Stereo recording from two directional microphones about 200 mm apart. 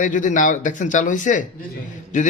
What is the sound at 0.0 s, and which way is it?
Speech, 40° left (ahead or behind).